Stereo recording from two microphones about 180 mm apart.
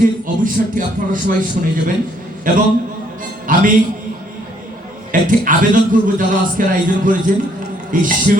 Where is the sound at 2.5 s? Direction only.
50° right (ahead or behind).